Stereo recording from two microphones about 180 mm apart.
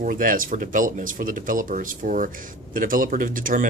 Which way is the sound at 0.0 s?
50° right (ahead or behind).